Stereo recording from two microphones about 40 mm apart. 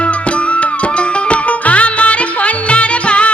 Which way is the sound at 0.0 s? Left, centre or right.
Left.